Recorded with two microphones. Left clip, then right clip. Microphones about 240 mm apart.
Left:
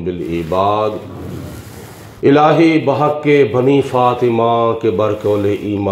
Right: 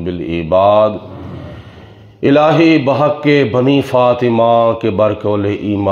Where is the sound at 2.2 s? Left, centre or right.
Right.